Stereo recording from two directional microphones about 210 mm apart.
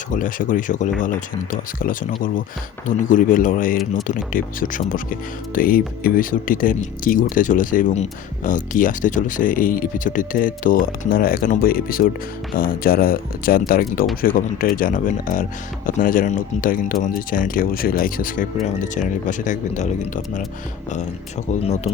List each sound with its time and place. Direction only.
0.1 s speech: 40° left (ahead or behind)